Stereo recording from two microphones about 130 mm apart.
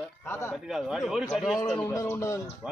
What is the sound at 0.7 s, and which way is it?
Speech, 5° right (ahead or behind).